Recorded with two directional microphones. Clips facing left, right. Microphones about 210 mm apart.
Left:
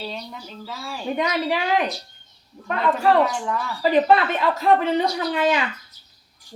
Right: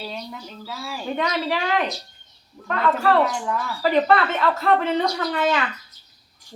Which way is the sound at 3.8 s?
15° left (ahead or behind).